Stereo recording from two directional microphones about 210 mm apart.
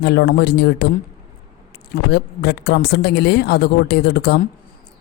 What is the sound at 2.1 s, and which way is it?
Speech, 50° left (ahead or behind).